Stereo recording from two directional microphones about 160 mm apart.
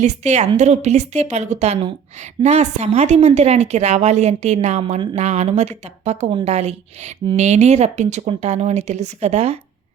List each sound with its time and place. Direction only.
0.0 s a woman's voice: 45° right (ahead or behind)